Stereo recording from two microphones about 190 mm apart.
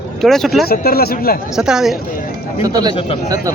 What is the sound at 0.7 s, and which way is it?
Speech, 55° left (ahead or behind).